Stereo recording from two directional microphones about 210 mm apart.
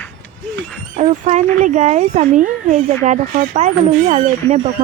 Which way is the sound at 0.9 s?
35° right (ahead or behind).